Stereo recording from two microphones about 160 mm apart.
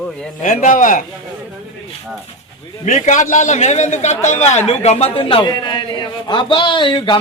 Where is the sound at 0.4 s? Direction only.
50° left (ahead or behind).